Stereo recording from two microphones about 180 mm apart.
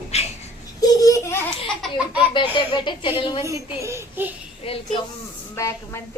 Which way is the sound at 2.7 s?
25° left (ahead or behind).